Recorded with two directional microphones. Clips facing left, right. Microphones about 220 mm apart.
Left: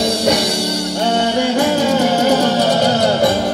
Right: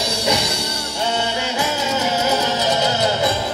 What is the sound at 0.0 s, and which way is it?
Music, 55° left (ahead or behind).